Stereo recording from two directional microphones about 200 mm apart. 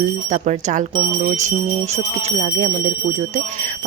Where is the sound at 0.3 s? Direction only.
35° right (ahead or behind).